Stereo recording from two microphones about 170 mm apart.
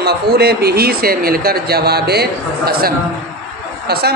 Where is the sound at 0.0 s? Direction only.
70° right (ahead or behind).